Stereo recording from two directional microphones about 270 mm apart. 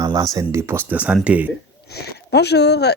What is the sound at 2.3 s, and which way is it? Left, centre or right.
Speech, left.